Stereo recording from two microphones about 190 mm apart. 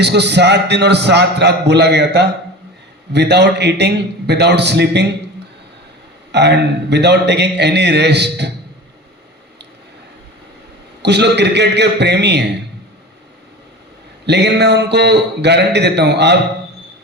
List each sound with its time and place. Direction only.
0.0 s a man's voice: 65° right (ahead or behind)
6.3 s a man's voice: 60° right (ahead or behind)
11.0 s a man's voice: 60° right (ahead or behind)
14.3 s a man's voice: 60° right (ahead or behind)